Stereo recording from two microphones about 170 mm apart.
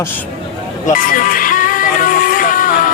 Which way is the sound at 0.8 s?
55° left (ahead or behind).